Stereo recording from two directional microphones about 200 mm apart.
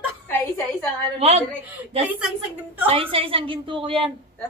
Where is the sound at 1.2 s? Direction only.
30° right (ahead or behind).